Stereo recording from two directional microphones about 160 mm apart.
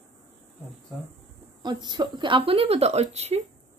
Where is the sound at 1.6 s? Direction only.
25° right (ahead or behind).